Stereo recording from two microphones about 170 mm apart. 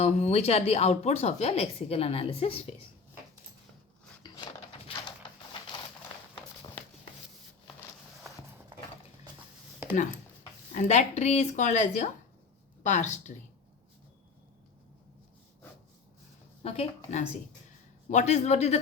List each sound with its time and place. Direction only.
0.0 s speech: 40° left (ahead or behind)
4.2 s a sound: 25° left (ahead or behind)
10.8 s a woman's voice: 45° left (ahead or behind)
16.6 s speech: 35° left (ahead or behind)